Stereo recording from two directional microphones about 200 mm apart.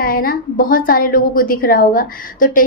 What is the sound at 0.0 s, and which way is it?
A woman's voice, 45° left (ahead or behind).